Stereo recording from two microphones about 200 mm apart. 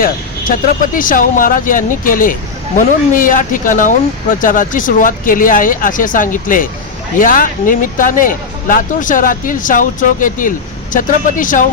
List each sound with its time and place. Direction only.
0.0 s speech: 45° left (ahead or behind)